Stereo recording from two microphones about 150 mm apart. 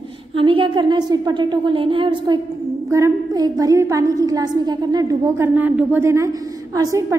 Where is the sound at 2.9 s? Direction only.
20° right (ahead or behind).